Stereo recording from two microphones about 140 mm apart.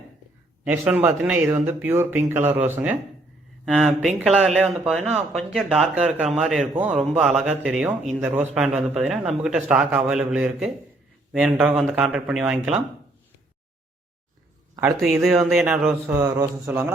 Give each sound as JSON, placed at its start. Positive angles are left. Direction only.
{"t": 0.6, "sound": "speech", "side_deg": -10}
{"t": 3.7, "sound": "a man's voice", "side_deg": -5}
{"t": 15.0, "sound": "a man's voice", "side_deg": -5}
{"t": 15.6, "sound": "speech", "side_deg": -15}